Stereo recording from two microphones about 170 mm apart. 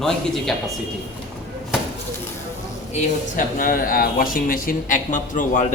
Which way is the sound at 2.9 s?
55° left (ahead or behind).